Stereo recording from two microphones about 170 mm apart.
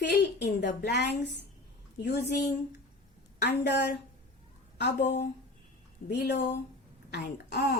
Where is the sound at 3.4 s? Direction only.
90° left.